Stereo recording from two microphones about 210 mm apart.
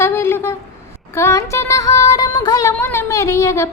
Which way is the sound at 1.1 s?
15° left (ahead or behind).